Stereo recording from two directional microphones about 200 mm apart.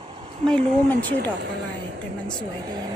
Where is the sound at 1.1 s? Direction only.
55° right (ahead or behind).